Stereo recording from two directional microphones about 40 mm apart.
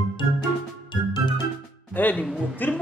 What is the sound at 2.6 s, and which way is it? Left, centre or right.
Speech, left.